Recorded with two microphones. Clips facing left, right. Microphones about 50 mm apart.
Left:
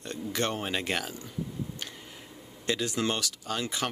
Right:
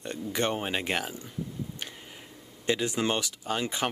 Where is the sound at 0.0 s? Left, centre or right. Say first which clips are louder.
Right 1 dB; centre.